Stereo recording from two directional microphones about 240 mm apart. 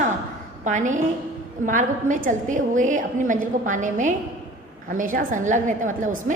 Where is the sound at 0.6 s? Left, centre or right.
Right.